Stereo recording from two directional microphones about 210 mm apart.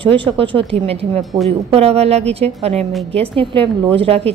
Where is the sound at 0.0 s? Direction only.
25° right (ahead or behind).